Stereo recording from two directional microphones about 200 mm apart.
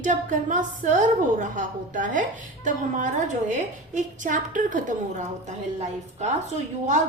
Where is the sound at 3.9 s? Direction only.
40° right (ahead or behind).